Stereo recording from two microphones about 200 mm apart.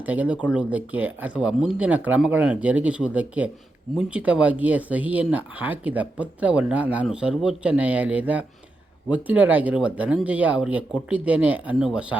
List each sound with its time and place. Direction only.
0.0 s speech: 10° right (ahead or behind)